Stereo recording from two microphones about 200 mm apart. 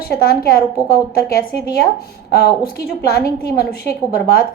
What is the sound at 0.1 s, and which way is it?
A woman's voice, 50° left (ahead or behind).